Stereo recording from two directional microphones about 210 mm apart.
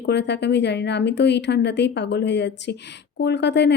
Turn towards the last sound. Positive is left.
turn(degrees=55)  # may be behind; listen again after turning